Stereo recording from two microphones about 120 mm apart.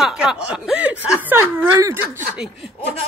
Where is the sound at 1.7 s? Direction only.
25° right (ahead or behind).